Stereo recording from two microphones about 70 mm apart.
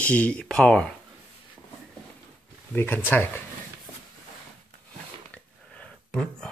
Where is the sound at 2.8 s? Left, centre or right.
Left.